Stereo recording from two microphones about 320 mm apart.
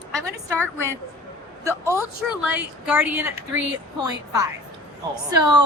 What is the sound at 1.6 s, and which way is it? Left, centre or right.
A woman's voice, centre.